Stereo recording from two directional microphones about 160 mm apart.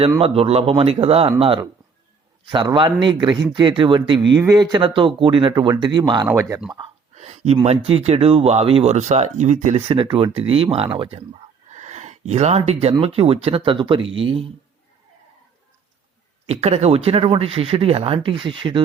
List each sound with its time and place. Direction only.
0.2 s speech: 35° right (ahead or behind); by 6.6 s 20° right (ahead or behind)
6.7 s speech: 30° right (ahead or behind)
7.2 s speech: 40° right (ahead or behind)
11.7 s speech: 45° right (ahead or behind)
16.5 s speech: 40° right (ahead or behind)